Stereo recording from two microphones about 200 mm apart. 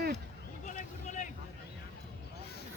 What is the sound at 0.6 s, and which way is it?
Vehicle, 40° left (ahead or behind).